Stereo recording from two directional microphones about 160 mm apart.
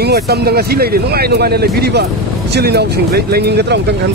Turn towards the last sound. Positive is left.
turn(degrees=-90)